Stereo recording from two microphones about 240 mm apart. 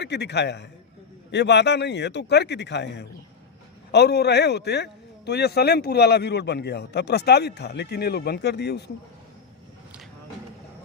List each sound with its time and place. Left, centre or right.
0.0 s speech: left